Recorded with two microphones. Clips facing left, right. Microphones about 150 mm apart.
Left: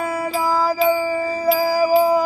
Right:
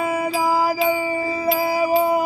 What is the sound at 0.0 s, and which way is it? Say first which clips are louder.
Music: right 1 dB; 10° right (ahead or behind).